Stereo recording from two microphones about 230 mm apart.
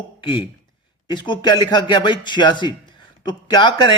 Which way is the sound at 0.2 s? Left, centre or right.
Left.